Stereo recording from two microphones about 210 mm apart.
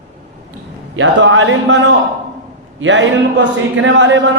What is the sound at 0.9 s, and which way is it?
A man's voice, 65° right (ahead or behind).